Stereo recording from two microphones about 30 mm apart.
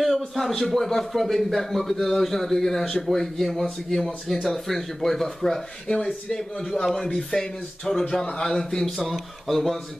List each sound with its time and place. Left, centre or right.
0.0 s a sound: centre
0.5 s a man's voice: centre
5.9 s speech: left
7.9 s a man's voice: left
8.8 s a man's voice: centre